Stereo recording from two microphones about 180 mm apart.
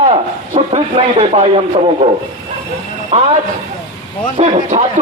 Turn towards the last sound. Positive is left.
turn(degrees=-40)  # may be behind; listen again after turning